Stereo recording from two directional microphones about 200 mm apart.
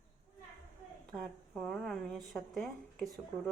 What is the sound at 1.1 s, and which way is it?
Speech, centre (ahead or behind).